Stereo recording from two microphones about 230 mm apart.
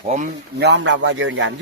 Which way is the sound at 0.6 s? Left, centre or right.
Right.